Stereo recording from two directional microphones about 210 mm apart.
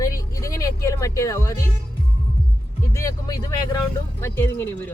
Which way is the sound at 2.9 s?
15° left (ahead or behind).